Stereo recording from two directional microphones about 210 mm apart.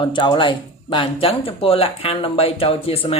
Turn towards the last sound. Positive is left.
turn(degrees=30)  # may be behind; listen again after turning